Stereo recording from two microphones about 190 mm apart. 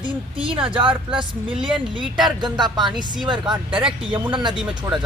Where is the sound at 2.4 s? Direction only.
20° right (ahead or behind).